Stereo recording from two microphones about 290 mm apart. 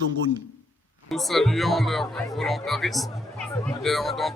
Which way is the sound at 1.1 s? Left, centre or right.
Centre.